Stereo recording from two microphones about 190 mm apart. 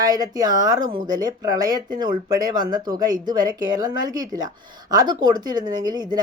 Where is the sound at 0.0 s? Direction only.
20° right (ahead or behind).